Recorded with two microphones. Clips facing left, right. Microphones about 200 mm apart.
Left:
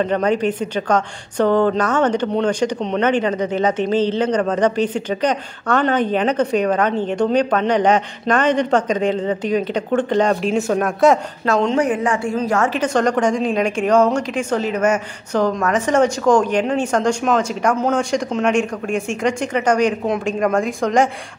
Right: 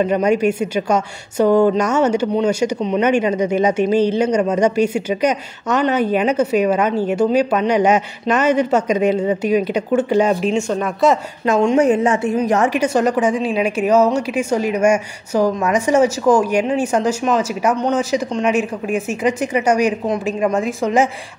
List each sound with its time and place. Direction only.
0.0 s a woman's voice: 10° right (ahead or behind)
11.4 s a woman's voice: 15° right (ahead or behind)